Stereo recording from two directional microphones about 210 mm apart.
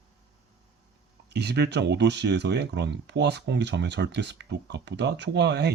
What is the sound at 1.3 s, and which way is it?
Speech, 50° right (ahead or behind).